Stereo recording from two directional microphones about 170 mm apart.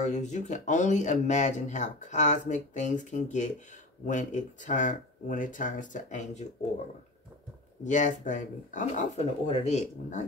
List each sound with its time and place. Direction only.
0.0 s speech: 45° left (ahead or behind)
7.8 s speech: 45° left (ahead or behind)